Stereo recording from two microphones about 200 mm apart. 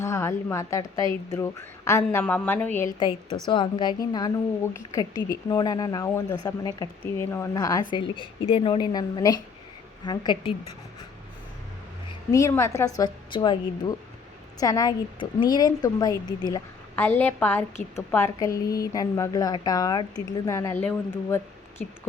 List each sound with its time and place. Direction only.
0.0 s a woman's voice: 15° left (ahead or behind)
3.0 s a woman's voice: 25° left (ahead or behind)
12.3 s a woman's voice: 15° left (ahead or behind)
16.9 s a woman's voice: 10° left (ahead or behind)